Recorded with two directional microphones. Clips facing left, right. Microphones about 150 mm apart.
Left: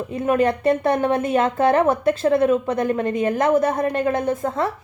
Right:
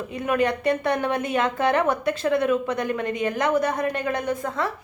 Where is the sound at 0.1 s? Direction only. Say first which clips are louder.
Left 4 dB; 30° left (ahead or behind).